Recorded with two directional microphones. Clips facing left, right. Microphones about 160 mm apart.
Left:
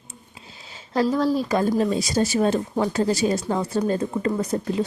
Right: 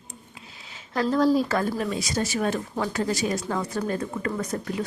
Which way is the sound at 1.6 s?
30° left (ahead or behind).